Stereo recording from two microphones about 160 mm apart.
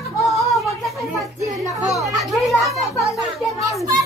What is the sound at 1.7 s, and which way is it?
Chatter, 45° right (ahead or behind).